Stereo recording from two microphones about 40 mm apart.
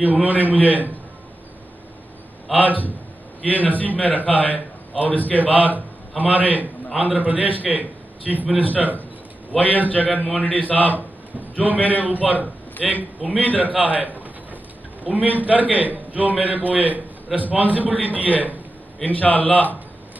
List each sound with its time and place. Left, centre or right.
0.0 s a man's voice: right
2.5 s a man's voice: right
3.4 s a man's voice: left
5.7 s a man's voice: right
9.6 s a man's voice: left
12.0 s a man's voice: right
12.8 s a man's voice: centre
13.5 s a man's voice: right
19.0 s a man's voice: left